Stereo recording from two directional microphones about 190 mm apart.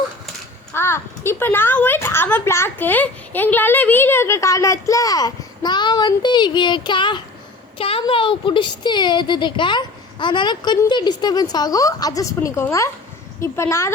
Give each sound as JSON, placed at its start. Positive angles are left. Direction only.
{"t": 0.7, "sound": "a woman's voice", "side_deg": 15}